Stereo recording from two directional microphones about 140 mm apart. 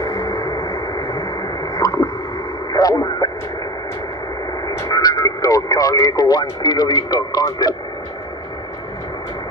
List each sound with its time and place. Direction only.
0.0 s radio: 30° left (ahead or behind)
4.6 s radio: 25° left (ahead or behind)